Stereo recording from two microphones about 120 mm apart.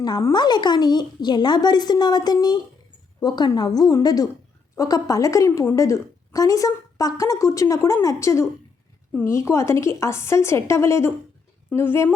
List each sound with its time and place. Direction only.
0.0 s a woman's voice: 30° left (ahead or behind)